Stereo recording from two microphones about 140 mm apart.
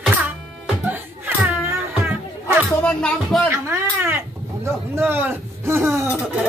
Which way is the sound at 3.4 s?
20° right (ahead or behind).